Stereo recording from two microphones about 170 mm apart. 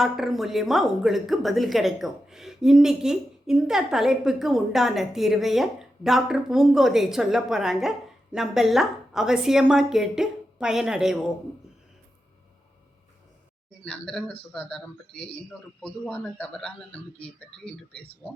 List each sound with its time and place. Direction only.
0.0 s a woman's voice: centre (ahead or behind)
13.8 s a woman's voice: 5° left (ahead or behind)